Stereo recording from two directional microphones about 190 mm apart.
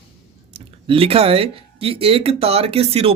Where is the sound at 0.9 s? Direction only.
30° right (ahead or behind).